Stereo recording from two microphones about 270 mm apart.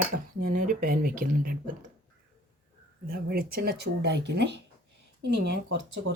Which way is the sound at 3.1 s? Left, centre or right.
Right.